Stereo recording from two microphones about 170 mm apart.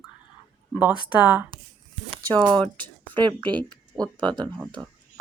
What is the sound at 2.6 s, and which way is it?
Speech, 10° left (ahead or behind).